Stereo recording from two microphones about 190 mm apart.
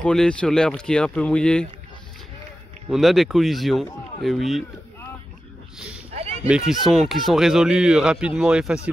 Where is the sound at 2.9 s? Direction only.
Centre (ahead or behind).